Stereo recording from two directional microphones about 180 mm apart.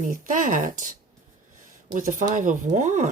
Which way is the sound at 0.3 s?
45° right (ahead or behind).